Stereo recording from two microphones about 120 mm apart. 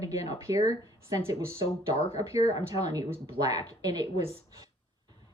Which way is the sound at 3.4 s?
30° right (ahead or behind).